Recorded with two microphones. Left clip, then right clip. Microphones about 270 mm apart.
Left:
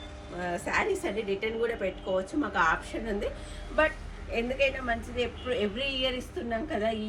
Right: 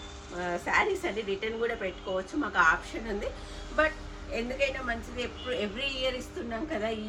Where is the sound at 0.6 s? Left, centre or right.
Centre.